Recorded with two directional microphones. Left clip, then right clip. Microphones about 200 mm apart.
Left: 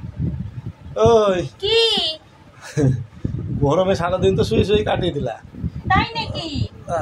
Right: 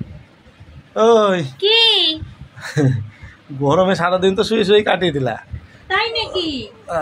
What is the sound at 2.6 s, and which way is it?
A man's voice, 15° right (ahead or behind).